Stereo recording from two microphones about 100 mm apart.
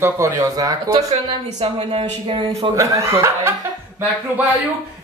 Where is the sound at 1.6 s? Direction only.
65° right (ahead or behind).